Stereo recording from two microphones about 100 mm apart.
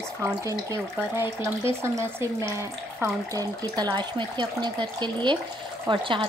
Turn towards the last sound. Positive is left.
turn(degrees=-55)  # may be behind; listen again after turning